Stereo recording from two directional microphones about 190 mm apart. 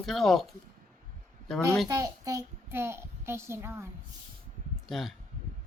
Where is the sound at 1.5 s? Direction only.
Centre (ahead or behind).